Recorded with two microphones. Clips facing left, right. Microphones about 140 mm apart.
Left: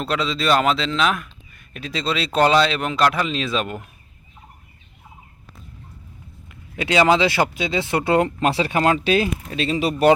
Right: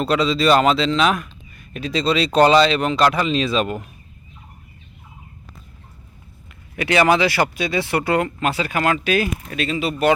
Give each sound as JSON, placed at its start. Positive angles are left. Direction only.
{"t": 0.0, "sound": "speech", "side_deg": 0}
{"t": 6.7, "sound": "speech", "side_deg": 20}